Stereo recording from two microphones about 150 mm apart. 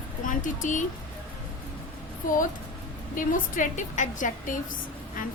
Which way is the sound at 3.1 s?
60° left (ahead or behind).